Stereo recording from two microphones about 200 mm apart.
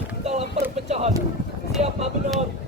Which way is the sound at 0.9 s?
35° right (ahead or behind).